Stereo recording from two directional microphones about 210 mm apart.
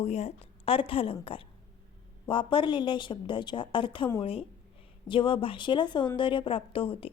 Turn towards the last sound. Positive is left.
turn(degrees=25)  # may be behind; listen again after turning